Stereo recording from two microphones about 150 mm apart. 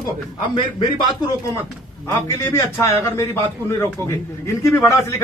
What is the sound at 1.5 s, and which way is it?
A man's voice, 20° left (ahead or behind).